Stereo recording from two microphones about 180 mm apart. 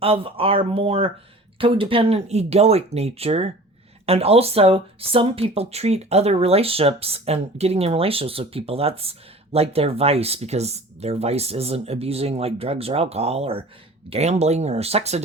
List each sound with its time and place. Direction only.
0.0 s speech: 30° right (ahead or behind)